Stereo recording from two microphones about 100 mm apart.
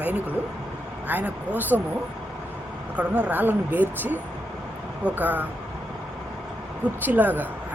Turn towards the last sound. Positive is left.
turn(degrees=-20)  # may be behind; listen again after turning